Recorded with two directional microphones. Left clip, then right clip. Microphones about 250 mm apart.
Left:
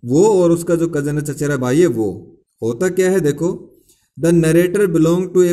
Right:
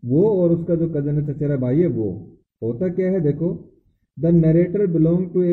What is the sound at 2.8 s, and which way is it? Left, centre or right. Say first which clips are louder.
Speech: left 6 dB; left.